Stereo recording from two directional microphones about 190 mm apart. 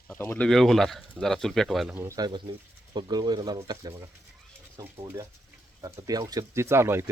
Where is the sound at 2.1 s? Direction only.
20° right (ahead or behind).